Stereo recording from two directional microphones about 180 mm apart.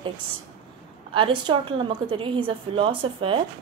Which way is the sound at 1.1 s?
30° right (ahead or behind).